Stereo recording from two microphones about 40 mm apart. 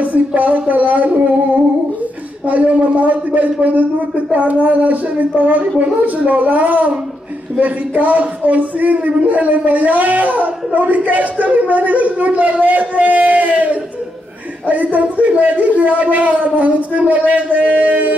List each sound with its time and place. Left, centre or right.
0.0 s speech: right